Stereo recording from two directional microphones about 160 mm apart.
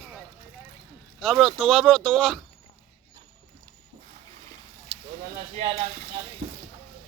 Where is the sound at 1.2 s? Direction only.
Centre (ahead or behind).